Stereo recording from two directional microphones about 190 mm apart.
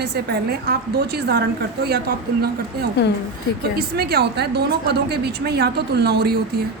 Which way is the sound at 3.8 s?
55° right (ahead or behind).